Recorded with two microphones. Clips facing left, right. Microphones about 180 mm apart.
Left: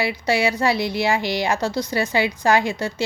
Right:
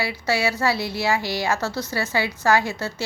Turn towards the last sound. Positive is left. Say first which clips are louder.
# left 3 dB
turn(degrees=15)  # may be behind; listen again after turning